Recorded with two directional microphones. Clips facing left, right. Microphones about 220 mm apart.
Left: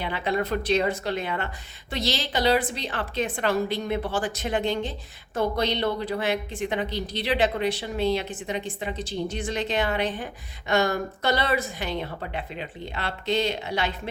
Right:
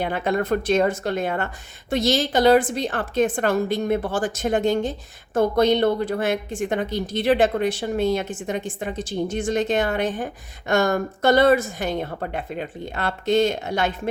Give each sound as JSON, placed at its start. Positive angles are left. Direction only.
{"t": 0.0, "sound": "a woman's voice", "side_deg": -45}